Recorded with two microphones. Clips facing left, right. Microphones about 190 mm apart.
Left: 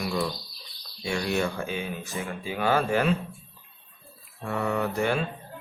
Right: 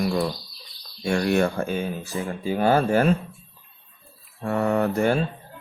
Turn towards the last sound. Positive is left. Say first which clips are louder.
# right 5 dB
turn(degrees=-40)  # may be behind; listen again after turning